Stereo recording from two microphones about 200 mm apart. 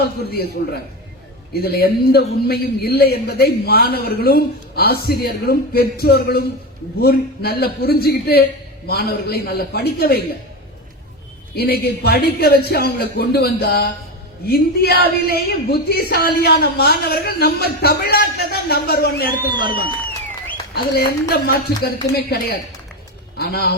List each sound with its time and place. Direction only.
0.0 s a man's voice: 50° left (ahead or behind)
11.5 s a man's voice: 50° left (ahead or behind)
20.9 s a man's voice: 55° left (ahead or behind)